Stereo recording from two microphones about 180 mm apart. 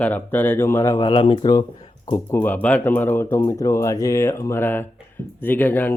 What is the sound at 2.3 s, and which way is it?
Speech, 10° left (ahead or behind).